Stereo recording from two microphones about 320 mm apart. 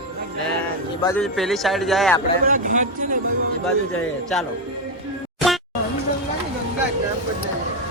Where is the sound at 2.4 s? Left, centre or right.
Right.